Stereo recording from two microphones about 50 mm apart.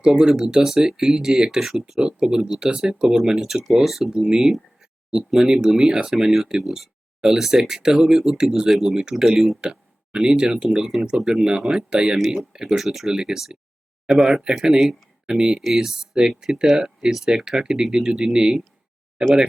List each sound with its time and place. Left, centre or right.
0.0 s speech: centre
2.0 s speech: centre
15.3 s speech: centre